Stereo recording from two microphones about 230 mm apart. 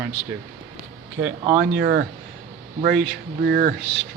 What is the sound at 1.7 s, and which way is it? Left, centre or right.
Speech, right.